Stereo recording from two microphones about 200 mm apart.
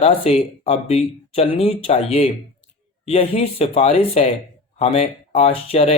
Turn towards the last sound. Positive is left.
turn(degrees=30)  # may be behind; listen again after turning